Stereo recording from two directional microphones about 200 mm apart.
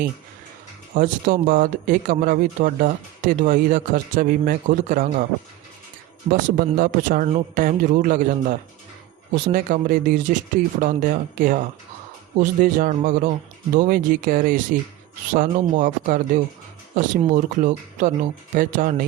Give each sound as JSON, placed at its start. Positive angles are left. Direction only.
{"t": 0.9, "sound": "speech", "side_deg": -45}
{"t": 6.7, "sound": "speech", "side_deg": -40}